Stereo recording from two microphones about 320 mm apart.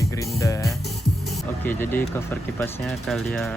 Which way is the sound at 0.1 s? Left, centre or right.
Centre.